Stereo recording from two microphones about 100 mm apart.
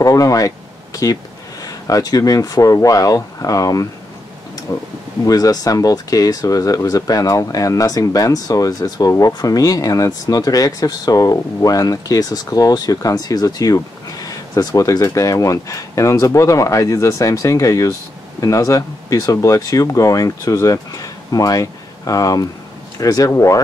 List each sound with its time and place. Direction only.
0.0 s speech: 35° left (ahead or behind)
1.6 s speech: 35° left (ahead or behind)